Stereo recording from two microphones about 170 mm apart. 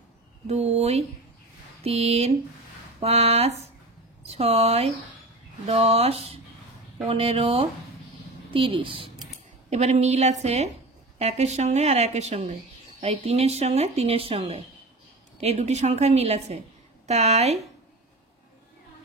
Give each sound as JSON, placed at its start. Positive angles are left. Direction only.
{"t": 0.5, "sound": "a woman's voice", "side_deg": -40}